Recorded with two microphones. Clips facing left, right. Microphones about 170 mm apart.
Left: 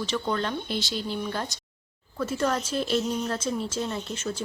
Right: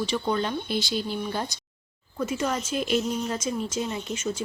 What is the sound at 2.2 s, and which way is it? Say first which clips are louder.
Speech: left 1 dB; 10° right (ahead or behind).